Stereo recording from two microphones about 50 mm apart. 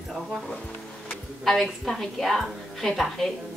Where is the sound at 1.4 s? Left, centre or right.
Centre.